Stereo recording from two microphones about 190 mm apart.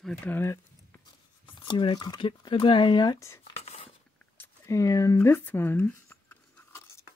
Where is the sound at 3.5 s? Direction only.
35° left (ahead or behind).